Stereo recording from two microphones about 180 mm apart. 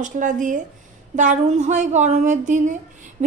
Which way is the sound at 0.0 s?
45° right (ahead or behind).